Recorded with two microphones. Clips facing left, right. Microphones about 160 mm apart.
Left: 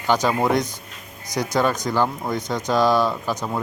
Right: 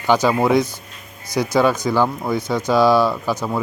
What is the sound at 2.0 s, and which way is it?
Speech, 5° right (ahead or behind).